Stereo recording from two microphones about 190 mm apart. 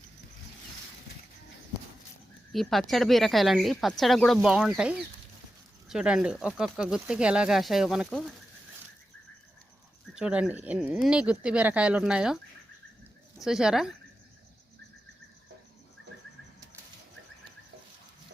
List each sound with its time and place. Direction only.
2.5 s speech: centre (ahead or behind)
10.2 s speech: 5° right (ahead or behind)
13.4 s speech: 5° right (ahead or behind)